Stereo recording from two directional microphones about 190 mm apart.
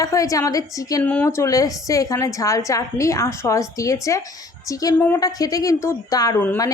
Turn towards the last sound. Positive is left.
turn(degrees=15)  # may be behind; listen again after turning